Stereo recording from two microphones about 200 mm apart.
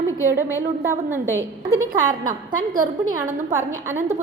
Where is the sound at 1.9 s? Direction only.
40° right (ahead or behind).